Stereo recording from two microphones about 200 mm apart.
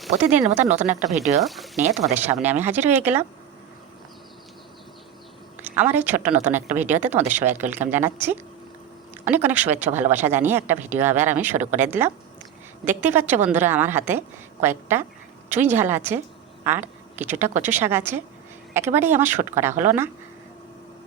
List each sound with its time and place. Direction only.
0.5 s speech: 35° right (ahead or behind)
1.4 s speech: centre (ahead or behind)
1.7 s speech: 35° right (ahead or behind)
2.1 s a woman's voice: 10° right (ahead or behind)
5.6 s a woman's voice: 10° right (ahead or behind)
9.2 s a woman's voice: 10° right (ahead or behind)